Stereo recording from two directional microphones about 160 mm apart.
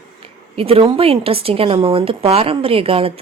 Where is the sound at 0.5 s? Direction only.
35° right (ahead or behind).